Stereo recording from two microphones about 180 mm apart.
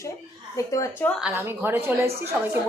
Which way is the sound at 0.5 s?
20° left (ahead or behind).